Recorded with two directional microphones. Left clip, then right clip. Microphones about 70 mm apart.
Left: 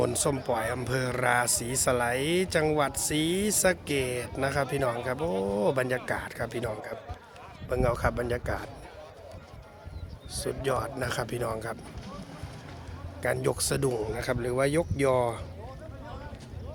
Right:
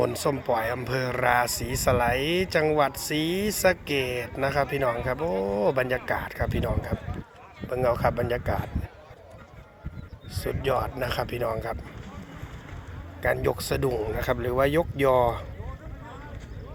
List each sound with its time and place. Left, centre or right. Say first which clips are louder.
0.0 s speech: right 2 dB; left
10.3 s speech: right 3 dB; left
13.2 s speech: right 3 dB; left
14.2 s speech: right 5 dB; centre